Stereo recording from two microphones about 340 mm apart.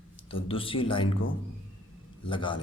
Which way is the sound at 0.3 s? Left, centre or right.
Centre.